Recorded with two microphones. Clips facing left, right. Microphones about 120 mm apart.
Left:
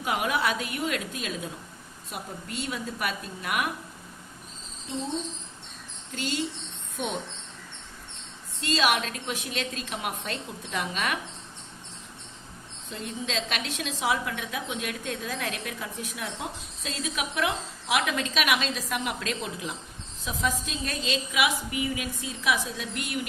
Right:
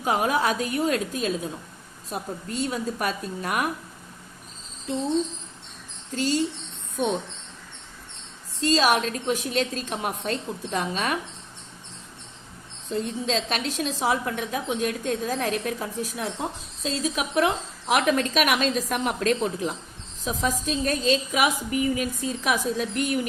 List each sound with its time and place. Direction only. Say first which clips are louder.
0.0 s a woman's voice: right 4 dB; 40° right (ahead or behind)
6.1 s a woman's voice: right 6 dB; 40° right (ahead or behind)
8.6 s a woman's voice: right 5 dB; 35° right (ahead or behind)
12.9 s a woman's voice: right 7 dB; 40° right (ahead or behind)